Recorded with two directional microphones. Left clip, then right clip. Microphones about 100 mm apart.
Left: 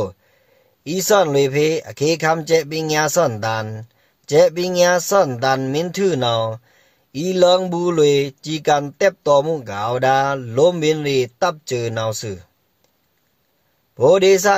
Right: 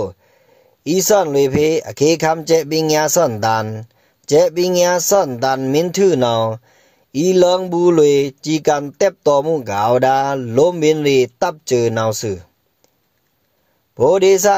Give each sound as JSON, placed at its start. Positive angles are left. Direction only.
{"t": 0.8, "sound": "speech", "side_deg": -35}
{"t": 6.7, "sound": "a sound", "side_deg": -35}
{"t": 7.7, "sound": "speech", "side_deg": -35}
{"t": 13.9, "sound": "speech", "side_deg": -40}